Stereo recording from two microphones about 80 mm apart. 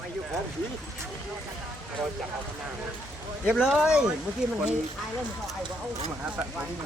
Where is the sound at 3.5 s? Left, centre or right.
Centre.